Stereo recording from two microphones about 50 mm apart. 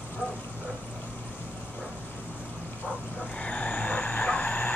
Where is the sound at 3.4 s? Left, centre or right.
Left.